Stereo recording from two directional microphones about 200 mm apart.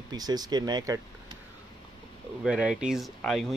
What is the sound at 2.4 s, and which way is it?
Speech, 5° right (ahead or behind).